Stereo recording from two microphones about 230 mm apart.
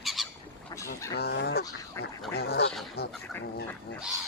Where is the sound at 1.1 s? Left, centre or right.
Left.